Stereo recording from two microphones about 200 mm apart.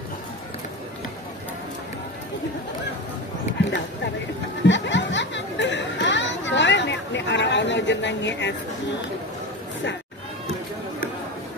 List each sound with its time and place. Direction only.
4.6 s chatter: 65° left (ahead or behind)